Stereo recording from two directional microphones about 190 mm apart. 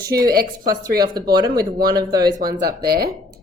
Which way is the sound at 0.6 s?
20° right (ahead or behind).